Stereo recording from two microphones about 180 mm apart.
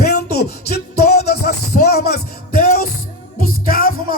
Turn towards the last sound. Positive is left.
turn(degrees=55)  # may be behind; listen again after turning